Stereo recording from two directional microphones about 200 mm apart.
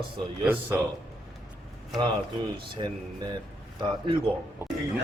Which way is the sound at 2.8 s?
25° right (ahead or behind).